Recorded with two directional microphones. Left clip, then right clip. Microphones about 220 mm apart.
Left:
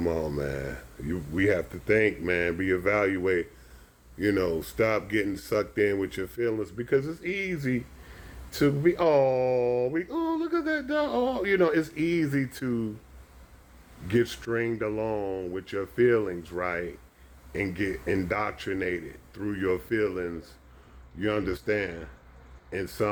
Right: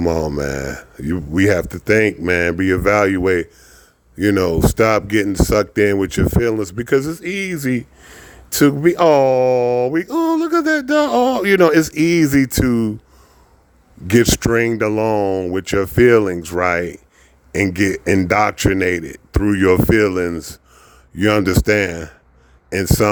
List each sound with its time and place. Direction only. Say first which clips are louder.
0.0 s speech: right 10 dB; 50° right (ahead or behind)
14.1 s speech: right 13 dB; 50° right (ahead or behind)